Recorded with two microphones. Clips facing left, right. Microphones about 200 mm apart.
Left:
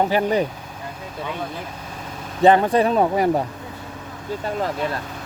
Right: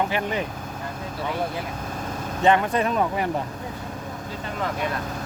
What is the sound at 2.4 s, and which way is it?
Speech, 35° left (ahead or behind).